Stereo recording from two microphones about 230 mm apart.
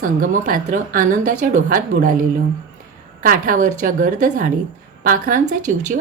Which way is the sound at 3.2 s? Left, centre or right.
Right.